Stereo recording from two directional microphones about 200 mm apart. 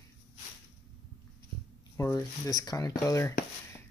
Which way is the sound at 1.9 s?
15° left (ahead or behind).